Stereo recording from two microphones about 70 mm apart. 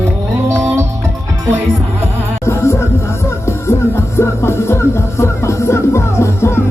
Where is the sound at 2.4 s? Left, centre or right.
Left.